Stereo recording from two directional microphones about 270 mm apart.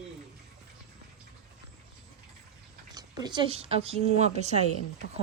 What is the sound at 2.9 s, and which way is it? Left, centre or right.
Speech, centre.